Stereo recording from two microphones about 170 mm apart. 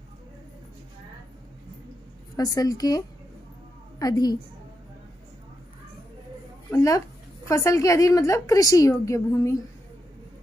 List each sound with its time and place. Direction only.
2.3 s a woman's voice: 20° left (ahead or behind)
4.0 s a woman's voice: 20° left (ahead or behind)
6.7 s a woman's voice: 20° left (ahead or behind)